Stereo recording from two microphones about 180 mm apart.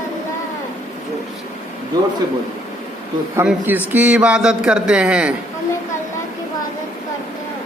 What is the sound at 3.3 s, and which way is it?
Speech, 10° right (ahead or behind).